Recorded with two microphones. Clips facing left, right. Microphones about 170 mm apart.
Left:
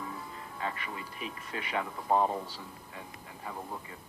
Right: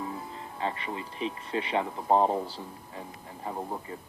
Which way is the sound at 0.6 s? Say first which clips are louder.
Right 5 dB; 30° right (ahead or behind).